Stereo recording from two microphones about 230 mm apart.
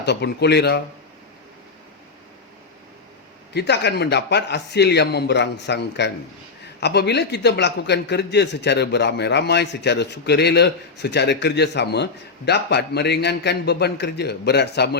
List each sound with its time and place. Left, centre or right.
0.0 s a man's voice: left
3.5 s a man's voice: left